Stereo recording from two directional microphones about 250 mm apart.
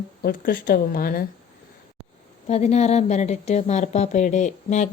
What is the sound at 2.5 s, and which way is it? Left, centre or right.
Speech, left.